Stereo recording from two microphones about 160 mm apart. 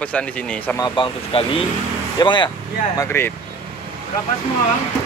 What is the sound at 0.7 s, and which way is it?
Speech, 30° left (ahead or behind).